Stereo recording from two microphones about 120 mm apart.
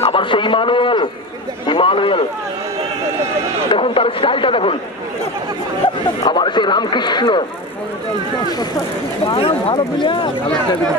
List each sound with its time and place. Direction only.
0.0 s a sound: 45° left (ahead or behind)
3.7 s a man's voice: 50° left (ahead or behind)
6.2 s a man's voice: 40° left (ahead or behind)
9.3 s a man's voice: 45° left (ahead or behind)